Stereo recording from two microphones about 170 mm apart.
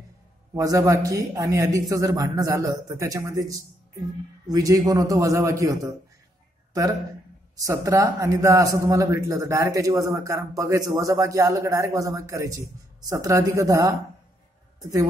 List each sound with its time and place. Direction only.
0.6 s a man's voice: 20° right (ahead or behind)